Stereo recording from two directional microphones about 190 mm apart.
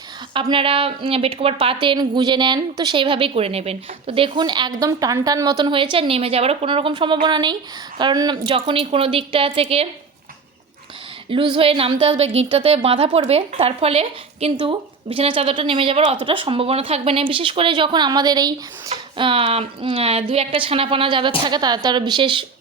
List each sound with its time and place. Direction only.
0.3 s a woman's voice: 25° right (ahead or behind)
11.3 s a woman's voice: 30° right (ahead or behind)